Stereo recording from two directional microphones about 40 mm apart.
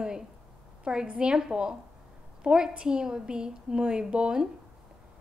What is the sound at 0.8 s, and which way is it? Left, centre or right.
A woman's voice, right.